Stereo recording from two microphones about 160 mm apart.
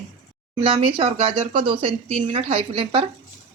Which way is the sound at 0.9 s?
35° right (ahead or behind).